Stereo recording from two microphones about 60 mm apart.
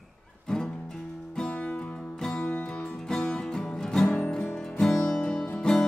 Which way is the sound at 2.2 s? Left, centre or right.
Centre.